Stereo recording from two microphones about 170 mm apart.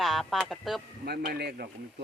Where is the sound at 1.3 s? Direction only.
70° right (ahead or behind).